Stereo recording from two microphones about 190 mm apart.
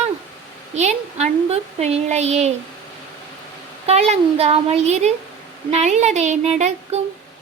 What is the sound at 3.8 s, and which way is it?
Speech, 35° right (ahead or behind).